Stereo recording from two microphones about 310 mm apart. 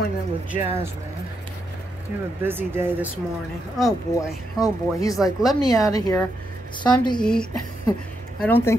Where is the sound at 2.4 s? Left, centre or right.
Centre.